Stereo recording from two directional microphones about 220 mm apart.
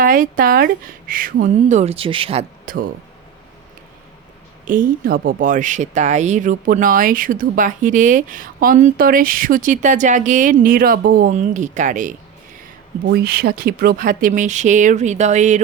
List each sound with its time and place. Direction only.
0.0 s speech: 40° right (ahead or behind)
2.6 s speech: 40° right (ahead or behind)
4.6 s speech: 35° right (ahead or behind)
13.1 s speech: 45° right (ahead or behind)